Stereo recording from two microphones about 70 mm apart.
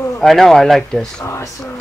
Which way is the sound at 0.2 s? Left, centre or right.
Centre.